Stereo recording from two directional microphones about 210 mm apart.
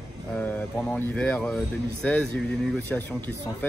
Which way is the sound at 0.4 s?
5° left (ahead or behind).